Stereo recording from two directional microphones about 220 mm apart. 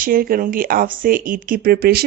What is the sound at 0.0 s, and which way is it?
Speech, 40° right (ahead or behind).